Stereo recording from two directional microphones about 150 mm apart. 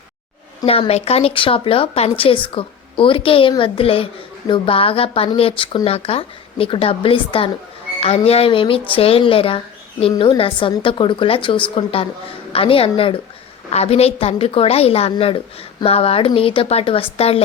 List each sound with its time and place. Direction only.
0.6 s a woman's voice: 40° left (ahead or behind)